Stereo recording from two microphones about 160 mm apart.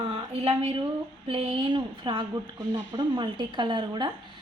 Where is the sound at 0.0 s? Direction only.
35° right (ahead or behind).